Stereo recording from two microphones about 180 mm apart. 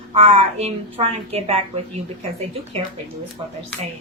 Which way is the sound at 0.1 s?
35° right (ahead or behind).